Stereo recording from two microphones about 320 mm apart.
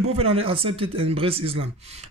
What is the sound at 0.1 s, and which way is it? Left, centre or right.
Speech, centre.